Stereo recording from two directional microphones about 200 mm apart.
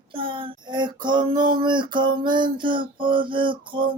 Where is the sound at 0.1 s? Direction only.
25° right (ahead or behind).